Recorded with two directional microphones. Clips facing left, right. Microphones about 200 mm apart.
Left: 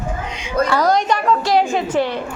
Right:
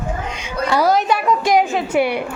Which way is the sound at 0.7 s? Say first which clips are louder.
Right 3 dB; 5° right (ahead or behind).